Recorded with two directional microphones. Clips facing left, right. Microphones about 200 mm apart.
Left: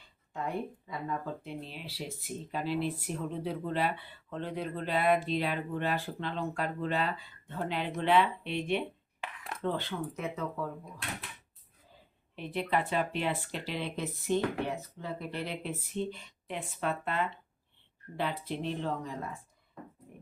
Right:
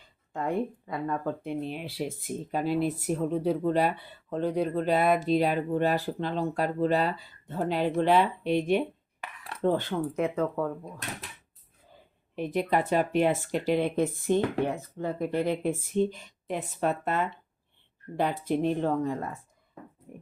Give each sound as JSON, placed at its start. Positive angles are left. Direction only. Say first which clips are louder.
{"t": 0.3, "sound": "speech", "louder": "right 6 dB", "side_deg": -55}
{"t": 12.4, "sound": "speech", "louder": "right 5 dB", "side_deg": -45}